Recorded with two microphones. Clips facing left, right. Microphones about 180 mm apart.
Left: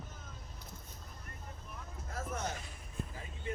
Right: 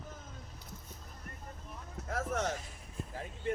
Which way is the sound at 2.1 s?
80° right.